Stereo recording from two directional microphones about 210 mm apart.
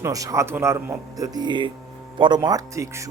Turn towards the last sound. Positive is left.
turn(degrees=-15)  # may be behind; listen again after turning